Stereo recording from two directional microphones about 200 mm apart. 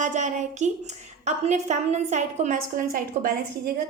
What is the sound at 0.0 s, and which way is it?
A woman's voice, 40° right (ahead or behind).